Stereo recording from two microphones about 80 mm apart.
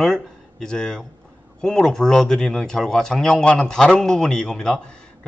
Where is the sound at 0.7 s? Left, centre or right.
Centre.